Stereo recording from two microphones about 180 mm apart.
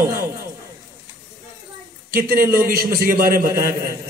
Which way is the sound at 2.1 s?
55° right (ahead or behind).